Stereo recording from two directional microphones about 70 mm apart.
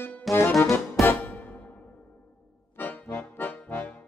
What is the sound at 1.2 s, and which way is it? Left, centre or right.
Music, left.